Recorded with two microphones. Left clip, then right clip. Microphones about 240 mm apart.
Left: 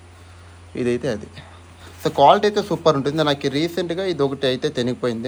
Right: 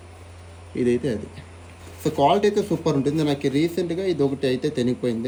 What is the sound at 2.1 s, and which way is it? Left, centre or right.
Speech, left.